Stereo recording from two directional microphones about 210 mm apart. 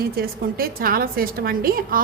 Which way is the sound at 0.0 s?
45° right (ahead or behind).